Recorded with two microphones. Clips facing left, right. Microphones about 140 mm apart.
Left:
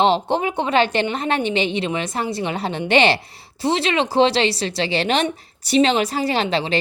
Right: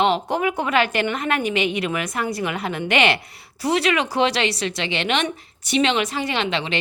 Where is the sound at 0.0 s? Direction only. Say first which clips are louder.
Left 2 dB; 30° left (ahead or behind).